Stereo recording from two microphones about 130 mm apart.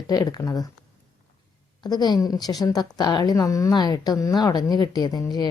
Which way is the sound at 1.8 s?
35° left (ahead or behind).